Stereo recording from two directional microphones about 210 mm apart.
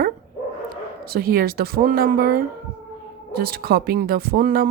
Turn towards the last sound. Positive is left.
turn(degrees=-45)  # may be behind; listen again after turning